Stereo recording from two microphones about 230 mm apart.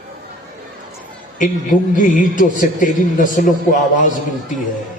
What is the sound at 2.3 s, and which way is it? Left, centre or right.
A man's voice, left.